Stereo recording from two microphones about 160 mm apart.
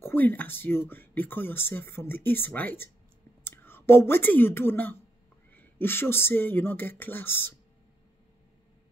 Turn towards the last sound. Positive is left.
turn(degrees=15)  # may be behind; listen again after turning